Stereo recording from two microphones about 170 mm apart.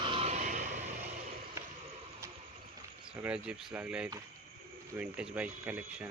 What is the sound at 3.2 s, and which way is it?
Speech, 10° right (ahead or behind).